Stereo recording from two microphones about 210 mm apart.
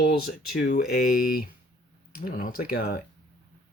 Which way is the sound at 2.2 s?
45° left (ahead or behind).